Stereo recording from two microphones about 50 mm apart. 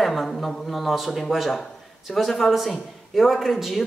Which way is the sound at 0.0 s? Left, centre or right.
Centre.